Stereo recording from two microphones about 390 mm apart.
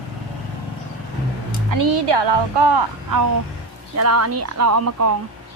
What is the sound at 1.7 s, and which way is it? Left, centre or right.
Speech, right.